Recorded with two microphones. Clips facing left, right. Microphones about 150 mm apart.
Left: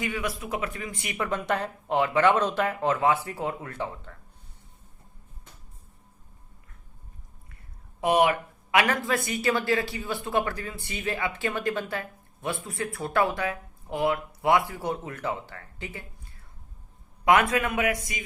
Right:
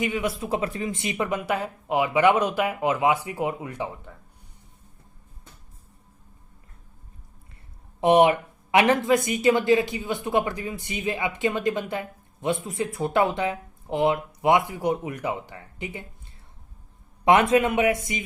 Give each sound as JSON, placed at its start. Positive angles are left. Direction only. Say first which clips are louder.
{"t": 0.0, "sound": "speech", "louder": "right 4 dB", "side_deg": -20}
{"t": 8.0, "sound": "speech", "louder": "right 5 dB", "side_deg": -25}
{"t": 17.2, "sound": "speech", "louder": "right 4 dB", "side_deg": -25}